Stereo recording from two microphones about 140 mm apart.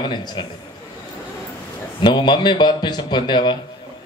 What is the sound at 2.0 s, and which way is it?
Speech, 35° left (ahead or behind).